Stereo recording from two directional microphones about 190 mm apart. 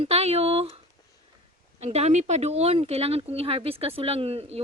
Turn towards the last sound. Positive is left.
turn(degrees=-30)  # may be behind; listen again after turning